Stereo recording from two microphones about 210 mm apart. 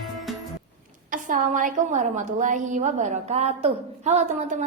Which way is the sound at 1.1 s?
40° right (ahead or behind).